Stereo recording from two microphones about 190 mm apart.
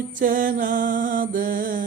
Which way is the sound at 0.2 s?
45° right (ahead or behind).